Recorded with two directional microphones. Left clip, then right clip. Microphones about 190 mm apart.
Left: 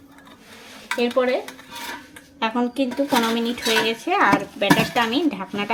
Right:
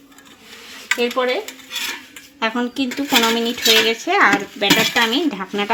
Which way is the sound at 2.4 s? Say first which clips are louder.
Right 1 dB; 15° right (ahead or behind).